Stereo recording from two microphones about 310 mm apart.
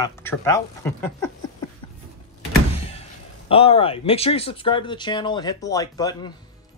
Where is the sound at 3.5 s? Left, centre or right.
Centre.